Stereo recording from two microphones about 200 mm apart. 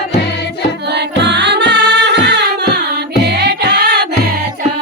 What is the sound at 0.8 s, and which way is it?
Music, 55° right (ahead or behind).